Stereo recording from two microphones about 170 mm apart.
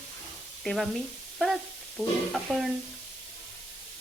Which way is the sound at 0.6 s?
Centre (ahead or behind).